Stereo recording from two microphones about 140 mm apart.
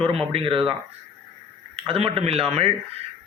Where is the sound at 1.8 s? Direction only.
40° right (ahead or behind).